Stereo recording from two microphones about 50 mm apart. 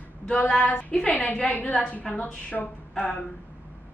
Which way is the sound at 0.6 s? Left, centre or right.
Left.